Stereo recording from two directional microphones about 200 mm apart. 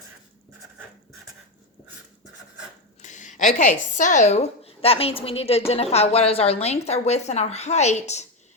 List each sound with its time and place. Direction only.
3.0 s a woman's voice: 35° left (ahead or behind)